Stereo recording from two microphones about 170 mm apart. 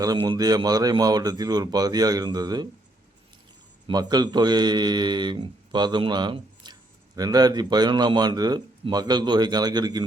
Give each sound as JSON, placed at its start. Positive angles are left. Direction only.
{"t": 0.0, "sound": "speech", "side_deg": -20}
{"t": 3.8, "sound": "speech", "side_deg": -25}